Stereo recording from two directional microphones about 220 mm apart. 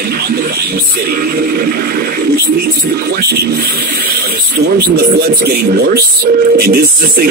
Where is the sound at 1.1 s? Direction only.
40° right (ahead or behind).